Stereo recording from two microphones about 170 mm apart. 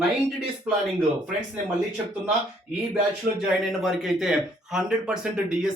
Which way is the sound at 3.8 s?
Centre (ahead or behind).